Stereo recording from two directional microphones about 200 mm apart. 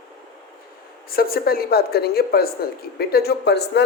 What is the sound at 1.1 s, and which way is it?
A man's voice, 50° left (ahead or behind).